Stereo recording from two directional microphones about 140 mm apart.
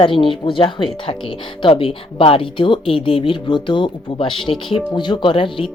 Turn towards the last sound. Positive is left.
turn(degrees=40)  # may be behind; listen again after turning